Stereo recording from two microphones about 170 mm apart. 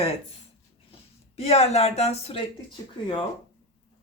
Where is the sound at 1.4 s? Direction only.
40° left (ahead or behind).